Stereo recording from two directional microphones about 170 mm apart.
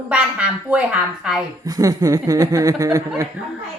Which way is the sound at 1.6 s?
20° right (ahead or behind).